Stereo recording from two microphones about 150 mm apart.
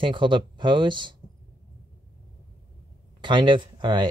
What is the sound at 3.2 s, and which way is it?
Speech, 30° right (ahead or behind).